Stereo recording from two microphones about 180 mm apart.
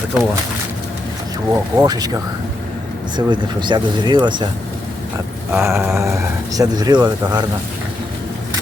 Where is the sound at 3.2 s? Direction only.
25° right (ahead or behind).